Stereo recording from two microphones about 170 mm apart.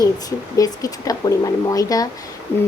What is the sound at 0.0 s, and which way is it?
Speech, 20° left (ahead or behind).